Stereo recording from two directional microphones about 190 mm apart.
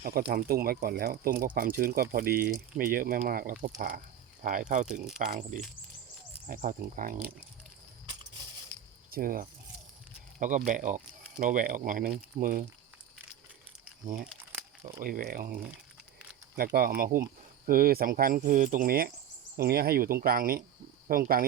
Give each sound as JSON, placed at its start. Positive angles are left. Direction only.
{"t": 0.3, "sound": "speech", "side_deg": -55}
{"t": 9.0, "sound": "speech", "side_deg": -50}
{"t": 10.7, "sound": "speech", "side_deg": -45}
{"t": 14.0, "sound": "speech", "side_deg": -45}
{"t": 14.3, "sound": "crumpling", "side_deg": -10}
{"t": 15.0, "sound": "speech", "side_deg": -50}